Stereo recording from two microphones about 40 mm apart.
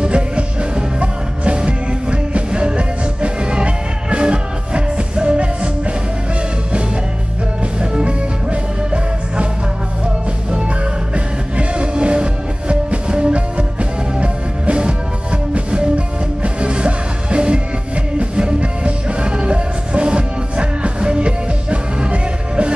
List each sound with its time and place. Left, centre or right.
0.0 s music: right
7.8 s music: right
11.1 s music: right